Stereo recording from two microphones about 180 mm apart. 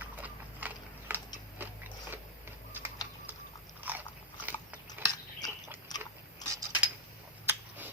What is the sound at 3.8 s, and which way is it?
Biting, 10° right (ahead or behind).